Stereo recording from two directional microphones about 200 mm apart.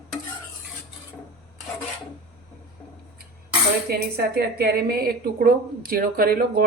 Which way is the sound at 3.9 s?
50° right (ahead or behind).